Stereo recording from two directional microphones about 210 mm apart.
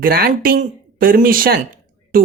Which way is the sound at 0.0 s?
45° right (ahead or behind).